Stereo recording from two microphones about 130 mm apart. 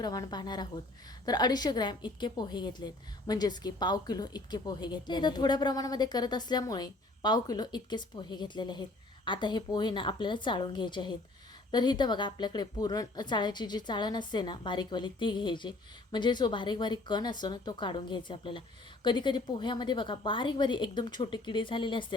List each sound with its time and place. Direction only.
0.0 s a woman's voice: 30° left (ahead or behind)